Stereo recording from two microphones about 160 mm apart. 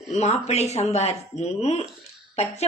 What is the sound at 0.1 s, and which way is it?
A woman's voice, 45° left (ahead or behind).